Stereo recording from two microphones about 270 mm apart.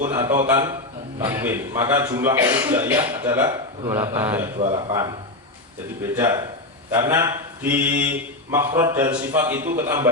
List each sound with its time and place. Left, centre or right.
0.1 s a man's voice: centre
4.5 s speech: right
4.9 s a man's voice: centre